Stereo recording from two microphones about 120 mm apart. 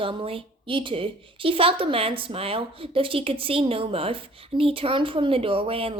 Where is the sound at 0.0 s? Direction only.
45° right (ahead or behind).